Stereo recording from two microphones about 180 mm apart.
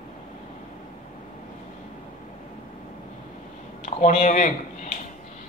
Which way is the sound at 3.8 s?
45° left (ahead or behind).